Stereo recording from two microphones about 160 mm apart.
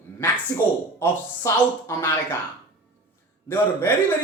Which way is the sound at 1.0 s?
20° left (ahead or behind).